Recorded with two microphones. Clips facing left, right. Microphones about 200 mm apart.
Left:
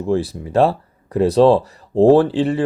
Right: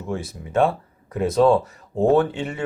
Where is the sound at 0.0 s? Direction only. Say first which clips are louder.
Left 9 dB; 35° left (ahead or behind).